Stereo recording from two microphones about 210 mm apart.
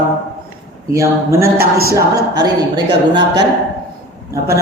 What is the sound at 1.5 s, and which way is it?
Speech, 45° right (ahead or behind).